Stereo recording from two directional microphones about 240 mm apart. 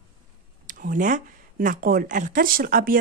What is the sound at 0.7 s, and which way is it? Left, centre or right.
A woman's voice, right.